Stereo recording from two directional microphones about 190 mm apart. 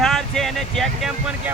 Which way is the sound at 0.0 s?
Centre (ahead or behind).